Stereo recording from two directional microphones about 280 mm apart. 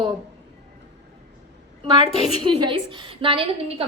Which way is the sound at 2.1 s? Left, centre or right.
Centre.